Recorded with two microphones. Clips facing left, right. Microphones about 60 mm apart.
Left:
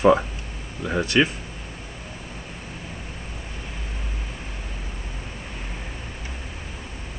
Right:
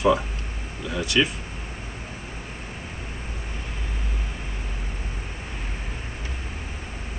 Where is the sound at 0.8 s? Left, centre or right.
Left.